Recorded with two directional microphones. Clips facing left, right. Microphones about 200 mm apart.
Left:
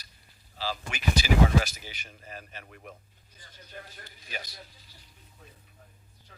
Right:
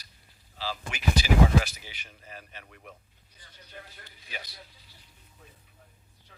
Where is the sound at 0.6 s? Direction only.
40° left (ahead or behind).